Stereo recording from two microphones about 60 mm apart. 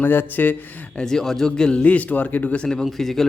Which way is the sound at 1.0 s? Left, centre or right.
Centre.